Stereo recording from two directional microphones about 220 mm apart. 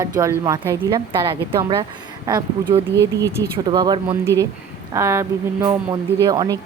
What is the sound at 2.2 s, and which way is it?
Speech, 20° right (ahead or behind).